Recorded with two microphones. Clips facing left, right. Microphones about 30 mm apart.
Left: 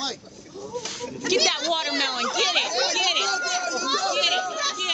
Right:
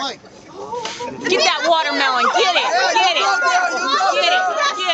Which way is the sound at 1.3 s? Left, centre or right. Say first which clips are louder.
Right 7 dB; centre.